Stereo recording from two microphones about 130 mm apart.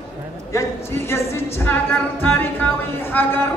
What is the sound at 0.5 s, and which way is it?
Speech, 20° left (ahead or behind).